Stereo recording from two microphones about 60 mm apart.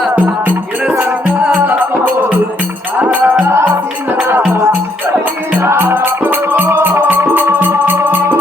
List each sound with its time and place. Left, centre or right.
0.9 s music: right
3.0 s music: right
5.5 s music: right